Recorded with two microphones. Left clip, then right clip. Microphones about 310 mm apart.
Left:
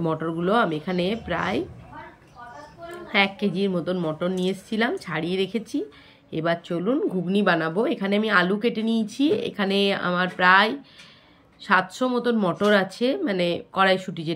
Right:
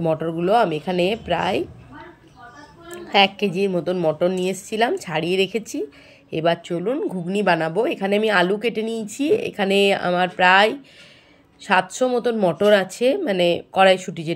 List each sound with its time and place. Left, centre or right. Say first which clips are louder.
0.1 s speech: right 5 dB; centre
3.1 s speech: right 5 dB; centre